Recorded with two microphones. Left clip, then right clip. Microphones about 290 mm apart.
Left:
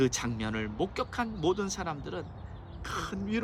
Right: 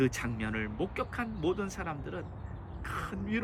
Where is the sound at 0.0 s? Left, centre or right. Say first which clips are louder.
Left 2 dB; centre.